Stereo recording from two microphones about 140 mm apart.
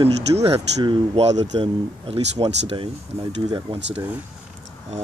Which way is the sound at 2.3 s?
35° right (ahead or behind).